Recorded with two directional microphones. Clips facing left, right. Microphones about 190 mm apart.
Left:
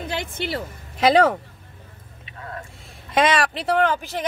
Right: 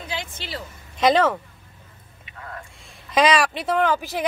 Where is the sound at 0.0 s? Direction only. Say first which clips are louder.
Left 5 dB; 55° left (ahead or behind).